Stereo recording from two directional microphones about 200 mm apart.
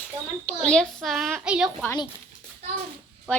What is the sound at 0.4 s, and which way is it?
A child's voice, 5° left (ahead or behind).